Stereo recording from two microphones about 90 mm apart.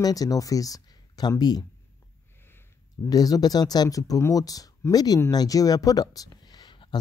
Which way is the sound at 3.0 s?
45° left (ahead or behind).